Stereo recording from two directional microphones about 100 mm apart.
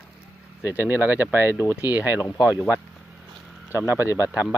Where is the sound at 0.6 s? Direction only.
20° right (ahead or behind).